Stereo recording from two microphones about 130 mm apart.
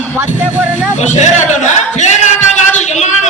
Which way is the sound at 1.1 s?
65° left (ahead or behind).